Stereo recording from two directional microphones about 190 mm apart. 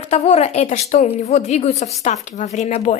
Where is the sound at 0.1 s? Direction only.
35° left (ahead or behind).